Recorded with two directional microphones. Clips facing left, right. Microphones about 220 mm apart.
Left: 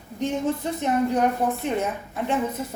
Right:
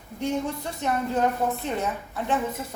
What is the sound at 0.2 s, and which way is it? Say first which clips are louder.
A woman's voice: left 3 dB; 20° left (ahead or behind).